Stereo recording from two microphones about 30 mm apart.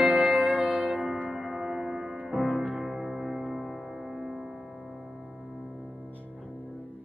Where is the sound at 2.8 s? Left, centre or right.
Centre.